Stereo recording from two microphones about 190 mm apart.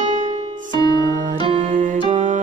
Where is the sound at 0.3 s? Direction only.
30° right (ahead or behind).